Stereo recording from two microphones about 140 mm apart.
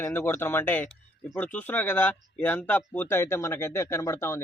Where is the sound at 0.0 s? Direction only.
15° left (ahead or behind).